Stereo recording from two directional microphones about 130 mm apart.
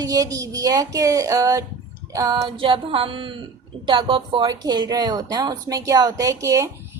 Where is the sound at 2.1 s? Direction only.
30° right (ahead or behind).